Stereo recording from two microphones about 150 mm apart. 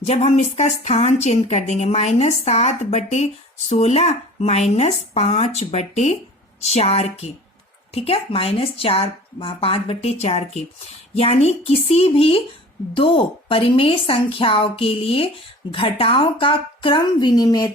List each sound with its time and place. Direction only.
0.0 s a woman's voice: 45° left (ahead or behind); by 17.7 s 25° left (ahead or behind)